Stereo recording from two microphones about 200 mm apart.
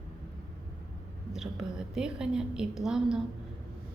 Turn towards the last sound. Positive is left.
turn(degrees=0)  # may be behind; listen again after turning